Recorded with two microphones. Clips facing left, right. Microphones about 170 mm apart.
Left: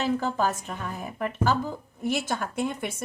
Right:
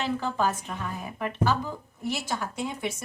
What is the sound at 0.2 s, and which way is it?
Speech, 45° left (ahead or behind).